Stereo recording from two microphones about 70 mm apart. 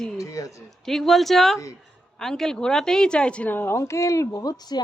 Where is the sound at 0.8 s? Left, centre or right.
Centre.